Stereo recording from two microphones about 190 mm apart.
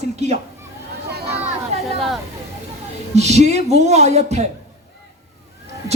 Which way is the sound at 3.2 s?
35° right (ahead or behind).